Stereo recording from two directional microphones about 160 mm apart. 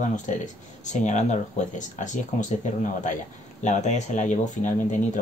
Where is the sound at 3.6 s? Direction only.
50° left (ahead or behind).